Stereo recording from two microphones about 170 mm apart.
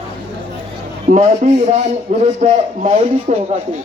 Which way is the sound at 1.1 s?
45° right (ahead or behind).